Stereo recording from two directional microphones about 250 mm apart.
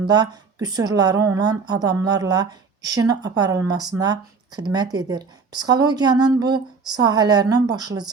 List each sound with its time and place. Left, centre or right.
0.1 s speech: centre